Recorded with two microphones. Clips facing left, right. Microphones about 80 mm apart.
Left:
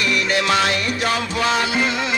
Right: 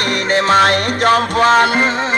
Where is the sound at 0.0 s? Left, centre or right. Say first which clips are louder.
Right 4 dB; right.